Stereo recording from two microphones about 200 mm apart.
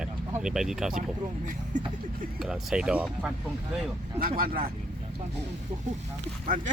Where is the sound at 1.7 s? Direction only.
40° right (ahead or behind).